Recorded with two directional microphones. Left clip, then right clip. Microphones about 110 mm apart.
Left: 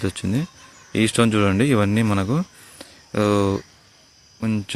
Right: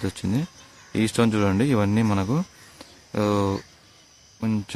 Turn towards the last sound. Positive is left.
turn(degrees=15)  # may be behind; listen again after turning